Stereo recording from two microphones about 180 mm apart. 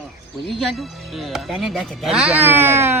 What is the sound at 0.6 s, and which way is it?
Speech, centre (ahead or behind).